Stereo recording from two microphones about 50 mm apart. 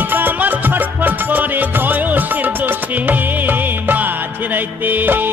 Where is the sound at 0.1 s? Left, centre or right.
Right.